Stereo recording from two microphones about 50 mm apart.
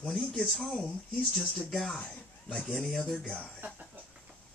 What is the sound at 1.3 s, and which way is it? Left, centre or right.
Speech, centre.